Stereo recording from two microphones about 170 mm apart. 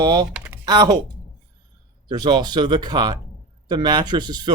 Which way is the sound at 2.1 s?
25° right (ahead or behind).